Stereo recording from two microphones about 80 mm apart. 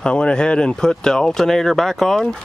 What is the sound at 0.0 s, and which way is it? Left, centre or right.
Speech, centre.